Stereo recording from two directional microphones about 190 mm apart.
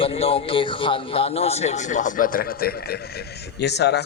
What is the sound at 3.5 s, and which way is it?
Speech, 60° left (ahead or behind).